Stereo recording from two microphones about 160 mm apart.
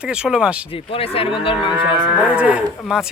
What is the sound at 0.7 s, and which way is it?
Cattle, 35° left (ahead or behind).